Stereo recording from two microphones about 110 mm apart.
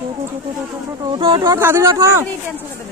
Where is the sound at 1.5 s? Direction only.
25° right (ahead or behind).